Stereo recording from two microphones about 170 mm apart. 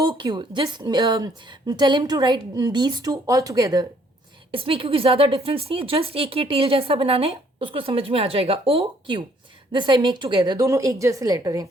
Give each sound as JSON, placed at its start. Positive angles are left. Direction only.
{"t": 0.0, "sound": "a woman's voice", "side_deg": -25}
{"t": 4.5, "sound": "a woman's voice", "side_deg": -30}